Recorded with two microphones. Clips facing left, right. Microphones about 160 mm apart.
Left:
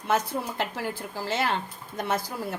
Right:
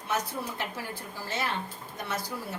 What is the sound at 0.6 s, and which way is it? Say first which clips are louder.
Speech: left 6 dB; 90° left.